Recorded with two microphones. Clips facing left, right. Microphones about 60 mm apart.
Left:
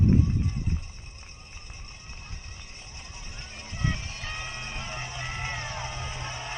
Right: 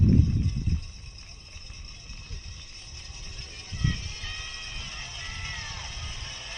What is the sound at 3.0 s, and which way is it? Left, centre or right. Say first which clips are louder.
Music: left 3 dB; left.